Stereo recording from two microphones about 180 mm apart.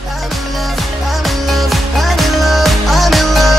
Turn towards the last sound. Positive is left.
turn(degrees=0)  # may be behind; listen again after turning